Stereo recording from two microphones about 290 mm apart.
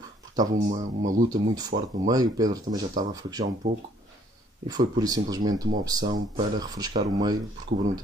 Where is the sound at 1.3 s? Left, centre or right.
Centre.